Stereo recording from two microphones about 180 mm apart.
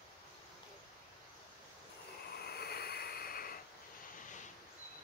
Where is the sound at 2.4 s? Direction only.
60° left (ahead or behind).